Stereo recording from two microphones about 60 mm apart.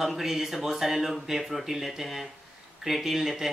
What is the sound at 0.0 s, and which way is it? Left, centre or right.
Speech, centre.